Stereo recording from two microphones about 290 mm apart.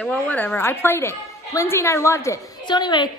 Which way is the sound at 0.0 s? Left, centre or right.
Centre.